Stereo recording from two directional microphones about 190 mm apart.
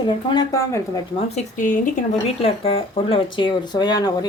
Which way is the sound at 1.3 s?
45° left (ahead or behind).